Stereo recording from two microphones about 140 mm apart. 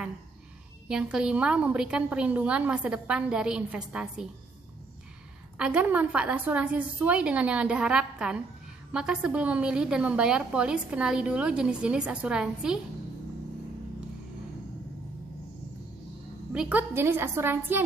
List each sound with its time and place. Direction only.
0.8 s a woman's voice: 5° right (ahead or behind)
5.6 s a woman's voice: 10° right (ahead or behind)
16.5 s a woman's voice: 10° right (ahead or behind)